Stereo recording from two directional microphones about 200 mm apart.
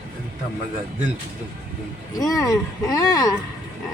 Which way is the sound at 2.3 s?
15° left (ahead or behind).